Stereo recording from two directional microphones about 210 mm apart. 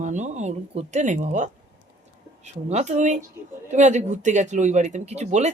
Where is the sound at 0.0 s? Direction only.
35° right (ahead or behind).